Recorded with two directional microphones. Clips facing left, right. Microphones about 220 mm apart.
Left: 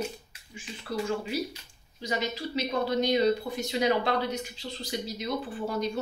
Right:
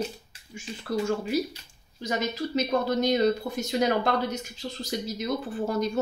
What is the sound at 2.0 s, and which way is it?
Speech, 45° right (ahead or behind).